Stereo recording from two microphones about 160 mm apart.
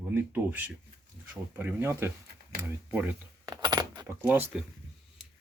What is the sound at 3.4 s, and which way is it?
Keys jangling, 25° right (ahead or behind).